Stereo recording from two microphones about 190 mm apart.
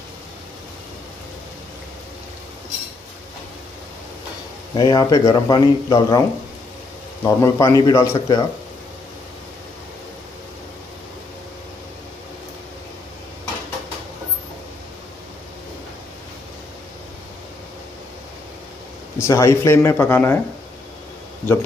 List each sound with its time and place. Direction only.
4.7 s speech: 20° left (ahead or behind)
7.2 s speech: 15° left (ahead or behind)
19.1 s speech: 15° left (ahead or behind)